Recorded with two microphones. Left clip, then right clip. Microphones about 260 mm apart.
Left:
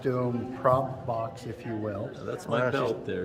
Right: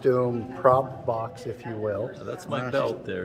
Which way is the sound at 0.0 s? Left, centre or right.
Right.